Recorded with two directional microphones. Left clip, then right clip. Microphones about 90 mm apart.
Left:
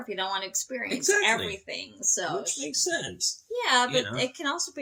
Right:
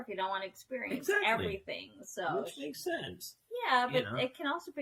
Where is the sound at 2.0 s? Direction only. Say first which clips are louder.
Left 8 dB; 20° left (ahead or behind).